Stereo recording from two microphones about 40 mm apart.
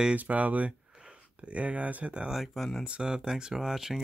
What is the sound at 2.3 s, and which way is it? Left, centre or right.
Speech, centre.